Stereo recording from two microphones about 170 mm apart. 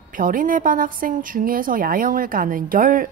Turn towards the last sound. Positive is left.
turn(degrees=-55)  # may be behind; listen again after turning